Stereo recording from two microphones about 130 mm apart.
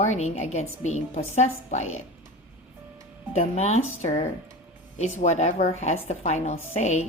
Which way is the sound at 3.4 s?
55° left (ahead or behind).